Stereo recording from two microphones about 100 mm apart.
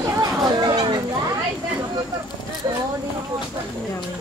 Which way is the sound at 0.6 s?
50° right (ahead or behind).